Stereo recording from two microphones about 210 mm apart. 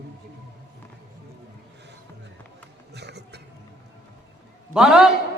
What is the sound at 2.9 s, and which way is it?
Music, 55° right (ahead or behind).